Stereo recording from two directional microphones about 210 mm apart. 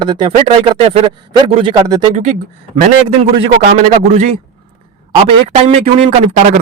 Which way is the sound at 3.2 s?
40° right (ahead or behind).